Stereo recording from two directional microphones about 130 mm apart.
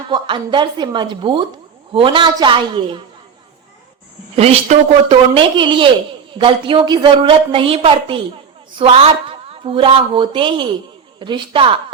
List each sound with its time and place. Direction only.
0.1 s a woman's voice: 35° right (ahead or behind)
4.4 s a woman's voice: 50° right (ahead or behind)